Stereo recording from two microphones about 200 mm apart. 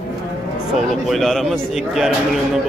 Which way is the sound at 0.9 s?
Centre (ahead or behind).